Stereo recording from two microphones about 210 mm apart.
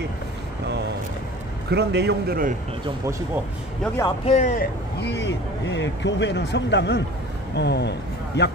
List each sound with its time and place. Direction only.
1.7 s a man's voice: 50° right (ahead or behind)
3.8 s speech: 10° left (ahead or behind)
4.2 s speech: 30° left (ahead or behind)
5.0 s speech: 55° left (ahead or behind)